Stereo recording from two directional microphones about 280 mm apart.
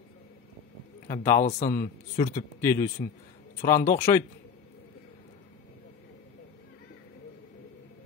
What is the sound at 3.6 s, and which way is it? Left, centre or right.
Speech, left.